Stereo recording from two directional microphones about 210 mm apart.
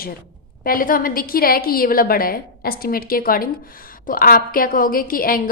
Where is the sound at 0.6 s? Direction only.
40° left (ahead or behind).